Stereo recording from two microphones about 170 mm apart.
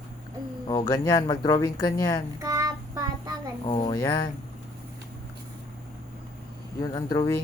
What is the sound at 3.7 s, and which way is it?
Speech, 20° left (ahead or behind).